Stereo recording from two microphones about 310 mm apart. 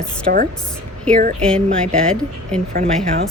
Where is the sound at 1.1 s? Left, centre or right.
Centre.